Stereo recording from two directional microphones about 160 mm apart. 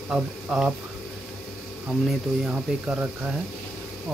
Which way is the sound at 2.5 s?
5° right (ahead or behind).